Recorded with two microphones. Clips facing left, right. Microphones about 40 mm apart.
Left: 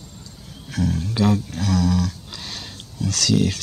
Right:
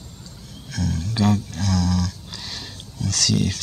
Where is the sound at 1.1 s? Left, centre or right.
Centre.